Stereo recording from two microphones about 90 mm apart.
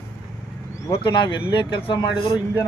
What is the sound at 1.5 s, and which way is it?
Speech, 65° left (ahead or behind).